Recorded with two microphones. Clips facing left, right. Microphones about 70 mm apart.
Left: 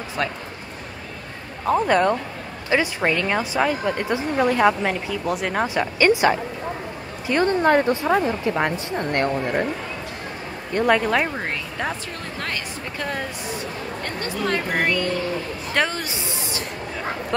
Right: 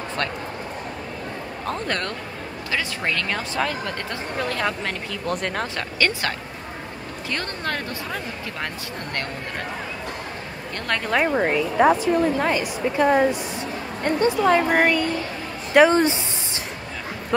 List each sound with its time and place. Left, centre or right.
1.7 s speech: centre
10.7 s speech: centre
11.1 s a woman's voice: centre
15.9 s a sound: right